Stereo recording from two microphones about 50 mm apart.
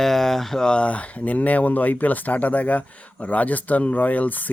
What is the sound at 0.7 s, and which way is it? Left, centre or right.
Speech, left.